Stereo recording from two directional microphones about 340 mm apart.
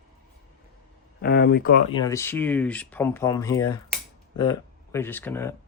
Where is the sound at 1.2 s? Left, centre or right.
Left.